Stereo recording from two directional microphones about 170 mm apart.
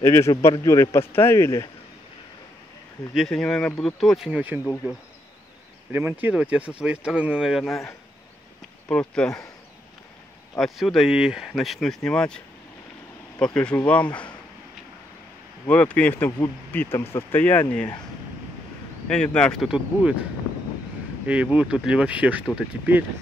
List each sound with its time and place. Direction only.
0.0 s speech: 15° left (ahead or behind)
3.2 s speech: 5° left (ahead or behind)
5.9 s speech: 10° right (ahead or behind)
8.8 s speech: 5° left (ahead or behind)
10.6 s speech: centre (ahead or behind)
13.4 s speech: 5° left (ahead or behind)
15.6 s speech: 10° left (ahead or behind)
19.0 s speech: 5° left (ahead or behind)
21.3 s speech: 5° right (ahead or behind)